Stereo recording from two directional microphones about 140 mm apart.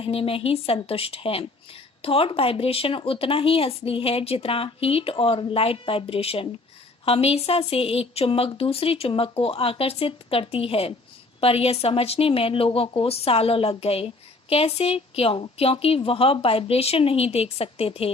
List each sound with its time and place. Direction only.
0.0 s a woman's voice: 40° left (ahead or behind)